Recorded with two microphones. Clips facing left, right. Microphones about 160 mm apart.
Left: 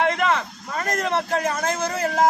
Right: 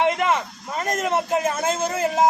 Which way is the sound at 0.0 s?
15° right (ahead or behind).